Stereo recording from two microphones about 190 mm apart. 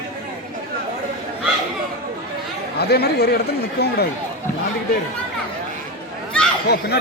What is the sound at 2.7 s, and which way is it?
Speech, 55° left (ahead or behind).